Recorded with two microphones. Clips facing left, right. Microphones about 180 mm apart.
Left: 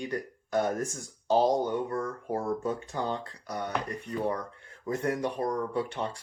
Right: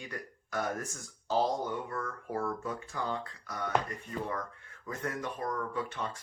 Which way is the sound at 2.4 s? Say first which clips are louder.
Left 4 dB; 25° left (ahead or behind).